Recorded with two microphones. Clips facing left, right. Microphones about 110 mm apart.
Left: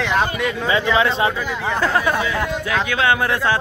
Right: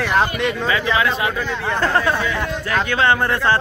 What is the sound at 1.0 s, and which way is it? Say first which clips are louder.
Speech: left 2 dB; 30° left (ahead or behind).